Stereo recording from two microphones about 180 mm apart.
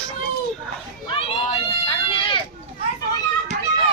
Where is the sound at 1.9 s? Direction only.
30° left (ahead or behind).